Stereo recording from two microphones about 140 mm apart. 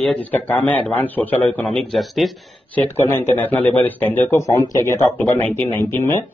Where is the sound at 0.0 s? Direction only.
10° left (ahead or behind).